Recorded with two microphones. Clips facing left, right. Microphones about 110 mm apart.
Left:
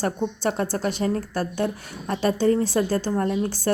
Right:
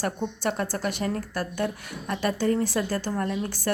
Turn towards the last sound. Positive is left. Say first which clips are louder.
# left 4 dB
turn(degrees=30)  # may be behind; listen again after turning